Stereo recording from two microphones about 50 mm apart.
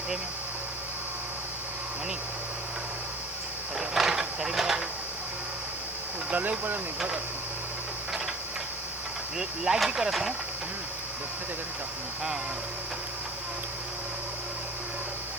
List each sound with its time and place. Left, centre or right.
3.8 s a sound: centre
6.3 s speech: right
9.4 s speech: centre